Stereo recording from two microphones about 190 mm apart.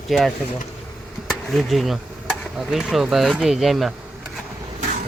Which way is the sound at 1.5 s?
Centre (ahead or behind).